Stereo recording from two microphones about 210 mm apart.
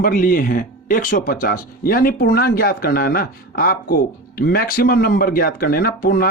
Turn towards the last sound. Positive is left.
turn(degrees=45)  # may be behind; listen again after turning